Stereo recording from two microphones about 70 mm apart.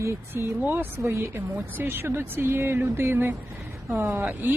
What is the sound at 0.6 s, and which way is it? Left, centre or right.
A woman's voice, right.